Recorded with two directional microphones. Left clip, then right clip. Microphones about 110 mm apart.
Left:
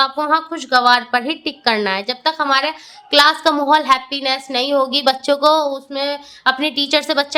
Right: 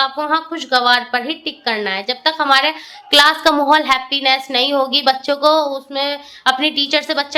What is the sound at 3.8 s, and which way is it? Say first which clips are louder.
A woman's voice: even; 20° left (ahead or behind).